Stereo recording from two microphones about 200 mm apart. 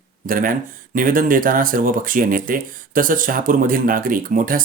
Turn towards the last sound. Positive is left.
turn(degrees=-45)  # may be behind; listen again after turning